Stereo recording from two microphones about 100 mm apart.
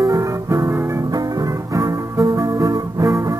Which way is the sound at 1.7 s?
35° right (ahead or behind).